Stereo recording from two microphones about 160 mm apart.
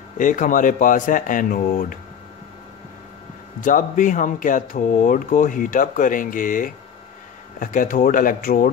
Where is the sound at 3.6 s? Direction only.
55° left (ahead or behind).